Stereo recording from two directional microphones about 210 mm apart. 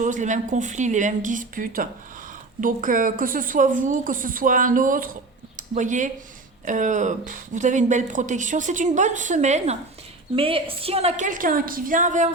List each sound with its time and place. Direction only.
0.0 s speech: 35° right (ahead or behind)